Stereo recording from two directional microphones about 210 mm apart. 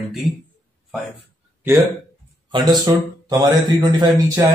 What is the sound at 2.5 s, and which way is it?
A man's voice, 20° right (ahead or behind).